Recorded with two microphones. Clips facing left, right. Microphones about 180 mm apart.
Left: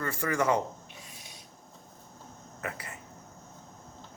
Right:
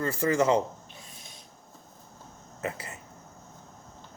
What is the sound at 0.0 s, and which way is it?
Speech, 25° right (ahead or behind).